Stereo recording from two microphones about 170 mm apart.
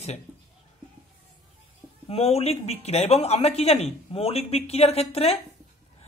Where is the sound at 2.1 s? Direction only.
35° left (ahead or behind).